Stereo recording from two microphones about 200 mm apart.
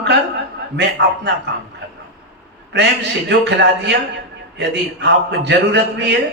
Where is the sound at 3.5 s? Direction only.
60° right (ahead or behind).